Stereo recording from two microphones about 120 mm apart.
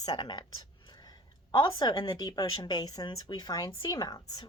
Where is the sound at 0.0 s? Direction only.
40° left (ahead or behind).